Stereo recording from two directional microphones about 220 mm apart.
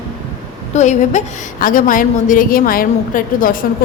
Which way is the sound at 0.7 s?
35° left (ahead or behind).